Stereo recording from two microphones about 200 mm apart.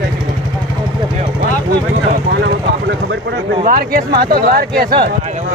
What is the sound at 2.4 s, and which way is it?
Speech, 65° right (ahead or behind).